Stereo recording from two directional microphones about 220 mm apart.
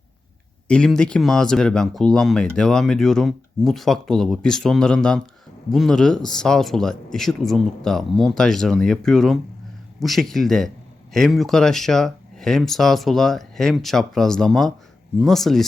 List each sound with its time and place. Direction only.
0.7 s speech: 5° left (ahead or behind)